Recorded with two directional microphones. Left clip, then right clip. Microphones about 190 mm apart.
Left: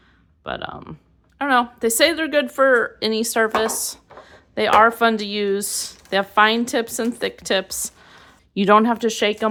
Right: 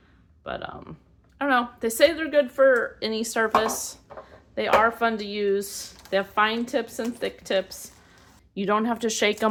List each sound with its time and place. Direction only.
0.4 s a woman's voice: 40° left (ahead or behind); by 9.5 s 20° left (ahead or behind)